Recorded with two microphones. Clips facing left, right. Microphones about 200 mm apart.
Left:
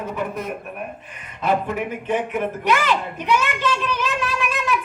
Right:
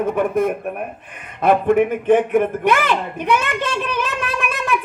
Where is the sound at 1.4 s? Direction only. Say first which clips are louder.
Right 8 dB; 55° right (ahead or behind).